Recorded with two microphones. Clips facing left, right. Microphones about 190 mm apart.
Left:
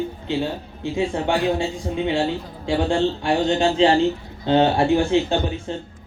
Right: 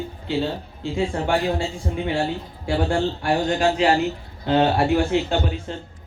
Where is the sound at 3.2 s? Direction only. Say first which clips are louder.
Left 1 dB; 25° left (ahead or behind).